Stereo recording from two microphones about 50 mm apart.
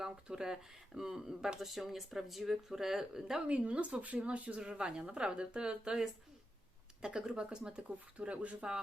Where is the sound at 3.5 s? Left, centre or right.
Right.